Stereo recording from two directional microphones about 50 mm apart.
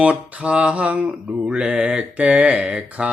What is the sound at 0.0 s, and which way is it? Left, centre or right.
Mantra, right.